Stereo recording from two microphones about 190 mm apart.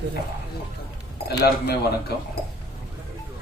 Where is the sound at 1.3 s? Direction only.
55° left (ahead or behind).